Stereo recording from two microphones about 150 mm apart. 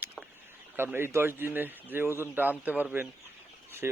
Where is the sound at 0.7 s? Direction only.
15° right (ahead or behind).